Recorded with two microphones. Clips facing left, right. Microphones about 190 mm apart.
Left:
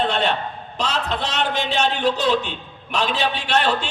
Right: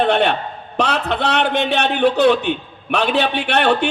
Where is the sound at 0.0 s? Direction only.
60° right (ahead or behind).